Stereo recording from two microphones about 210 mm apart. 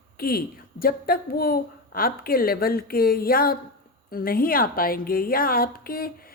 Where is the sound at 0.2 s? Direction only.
45° left (ahead or behind).